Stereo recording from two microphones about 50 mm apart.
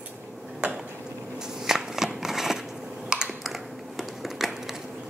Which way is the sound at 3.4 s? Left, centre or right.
Centre.